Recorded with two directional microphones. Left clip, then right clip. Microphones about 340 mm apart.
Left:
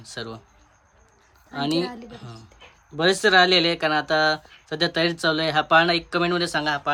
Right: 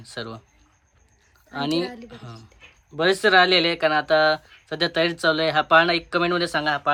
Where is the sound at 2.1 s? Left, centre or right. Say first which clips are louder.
Even; centre.